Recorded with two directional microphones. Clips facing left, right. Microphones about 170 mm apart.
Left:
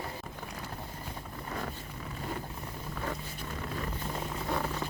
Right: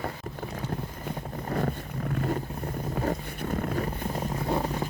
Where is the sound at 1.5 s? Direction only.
45° right (ahead or behind).